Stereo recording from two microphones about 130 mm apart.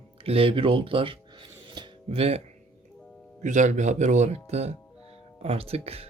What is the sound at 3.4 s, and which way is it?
Speech, 70° right (ahead or behind).